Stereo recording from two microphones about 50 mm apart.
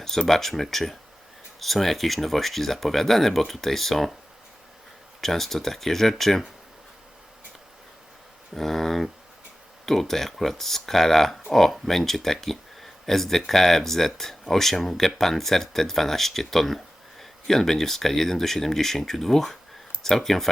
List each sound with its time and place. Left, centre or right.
0.3 s speech: centre
5.2 s speech: centre
8.5 s speech: centre